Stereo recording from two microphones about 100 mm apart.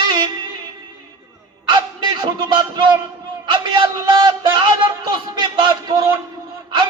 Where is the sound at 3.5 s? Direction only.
50° right (ahead or behind).